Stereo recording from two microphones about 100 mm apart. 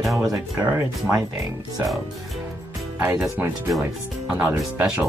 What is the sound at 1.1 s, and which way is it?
Speech, 30° right (ahead or behind).